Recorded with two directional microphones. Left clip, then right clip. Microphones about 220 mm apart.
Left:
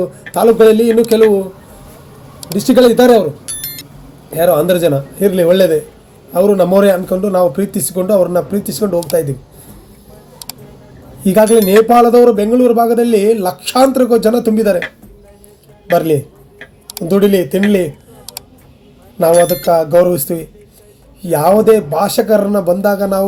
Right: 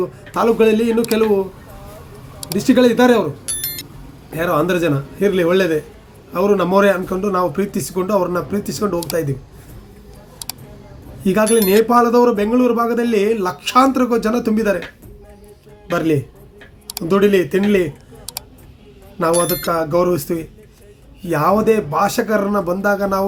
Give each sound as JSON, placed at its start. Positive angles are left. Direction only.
{"t": 0.3, "sound": "speech", "side_deg": -10}
{"t": 2.4, "sound": "speech", "side_deg": -5}
{"t": 10.4, "sound": "tick", "side_deg": 0}
{"t": 11.2, "sound": "speech", "side_deg": -5}
{"t": 15.9, "sound": "speech", "side_deg": -5}
{"t": 19.2, "sound": "speech", "side_deg": 0}